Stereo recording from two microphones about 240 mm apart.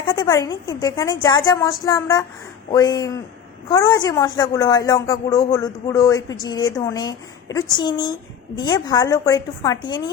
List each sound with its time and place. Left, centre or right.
0.1 s speech: centre